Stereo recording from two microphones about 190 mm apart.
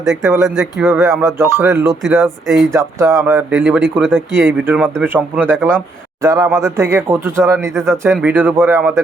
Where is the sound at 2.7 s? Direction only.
15° right (ahead or behind); by 4.1 s centre (ahead or behind).